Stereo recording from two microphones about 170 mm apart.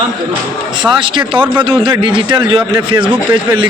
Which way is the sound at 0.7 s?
30° right (ahead or behind).